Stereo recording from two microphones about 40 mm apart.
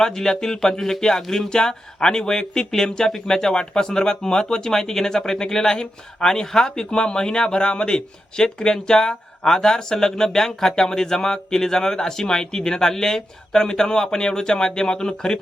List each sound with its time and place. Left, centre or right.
0.0 s speech: centre